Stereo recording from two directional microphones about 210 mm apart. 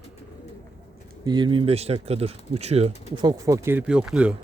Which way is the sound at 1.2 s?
20° right (ahead or behind).